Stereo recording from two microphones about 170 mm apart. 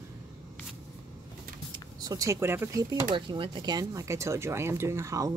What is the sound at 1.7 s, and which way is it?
Speech, 20° right (ahead or behind).